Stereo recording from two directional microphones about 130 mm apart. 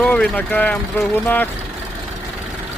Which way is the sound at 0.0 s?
10° left (ahead or behind).